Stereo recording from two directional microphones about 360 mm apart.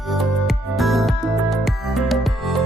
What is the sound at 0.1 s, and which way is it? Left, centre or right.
Music, centre.